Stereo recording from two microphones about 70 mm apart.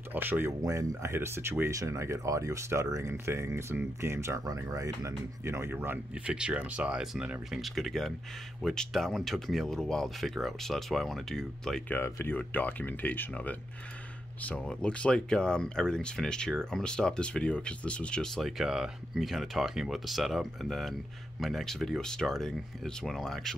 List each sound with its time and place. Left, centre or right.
0.1 s speech: right
0.6 s speech: right
1.7 s speech: right
4.6 s speech: right
6.1 s speech: centre
7.6 s speech: centre
11.9 s speech: left
14.6 s speech: centre
18.4 s speech: centre